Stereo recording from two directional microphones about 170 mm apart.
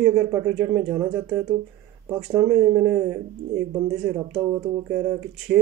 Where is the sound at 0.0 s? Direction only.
15° right (ahead or behind).